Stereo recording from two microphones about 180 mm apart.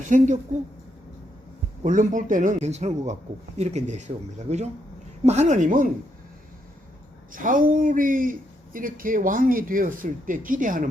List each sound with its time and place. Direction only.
0.0 s speech: 45° right (ahead or behind)
1.8 s speech: 45° right (ahead or behind)
7.3 s speech: 50° right (ahead or behind)